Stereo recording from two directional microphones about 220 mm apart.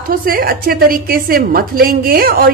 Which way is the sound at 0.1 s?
40° right (ahead or behind).